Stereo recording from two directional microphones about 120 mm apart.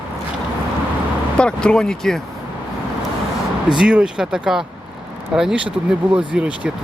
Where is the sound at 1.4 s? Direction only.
10° left (ahead or behind).